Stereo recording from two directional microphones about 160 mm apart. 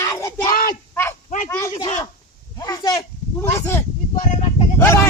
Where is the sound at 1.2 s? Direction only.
50° left (ahead or behind).